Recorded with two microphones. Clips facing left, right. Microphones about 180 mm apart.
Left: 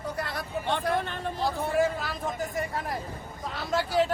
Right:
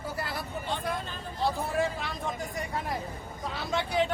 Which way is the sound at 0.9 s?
65° left (ahead or behind).